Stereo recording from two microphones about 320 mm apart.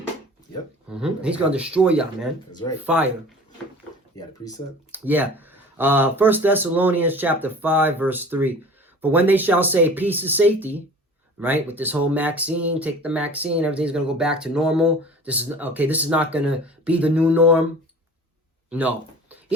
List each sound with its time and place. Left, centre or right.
0.9 s speech: centre
2.5 s speech: centre
2.8 s speech: centre
4.1 s speech: centre
4.9 s speech: centre
18.7 s a sound: centre